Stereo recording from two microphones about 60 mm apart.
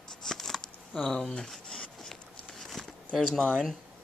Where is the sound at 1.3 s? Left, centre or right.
Centre.